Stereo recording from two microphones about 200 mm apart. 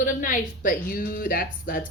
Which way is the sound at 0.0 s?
40° left (ahead or behind).